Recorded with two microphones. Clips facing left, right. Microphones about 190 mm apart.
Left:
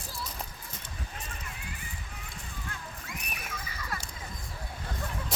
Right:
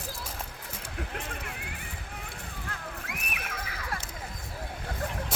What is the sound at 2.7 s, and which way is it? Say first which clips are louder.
Horse: right 4 dB; 70° right (ahead or behind).